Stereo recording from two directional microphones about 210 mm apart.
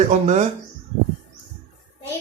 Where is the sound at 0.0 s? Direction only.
35° right (ahead or behind).